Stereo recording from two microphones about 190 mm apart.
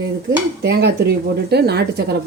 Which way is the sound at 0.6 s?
60° right (ahead or behind).